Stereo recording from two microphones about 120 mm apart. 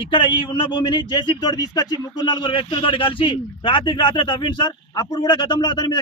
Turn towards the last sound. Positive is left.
turn(degrees=35)  # may be behind; listen again after turning